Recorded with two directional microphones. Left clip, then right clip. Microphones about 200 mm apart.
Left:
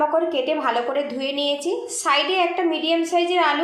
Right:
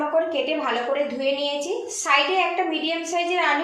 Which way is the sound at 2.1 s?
40° left (ahead or behind).